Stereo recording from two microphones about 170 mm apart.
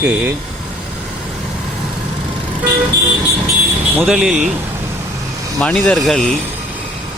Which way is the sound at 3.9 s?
5° right (ahead or behind).